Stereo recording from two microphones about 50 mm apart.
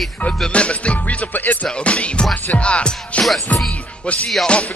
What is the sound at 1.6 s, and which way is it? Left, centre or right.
Music, left.